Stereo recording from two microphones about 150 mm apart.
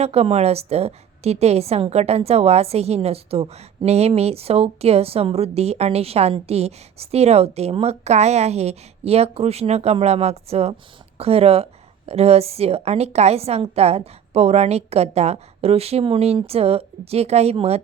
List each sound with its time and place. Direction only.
0.0 s a woman's voice: 45° right (ahead or behind)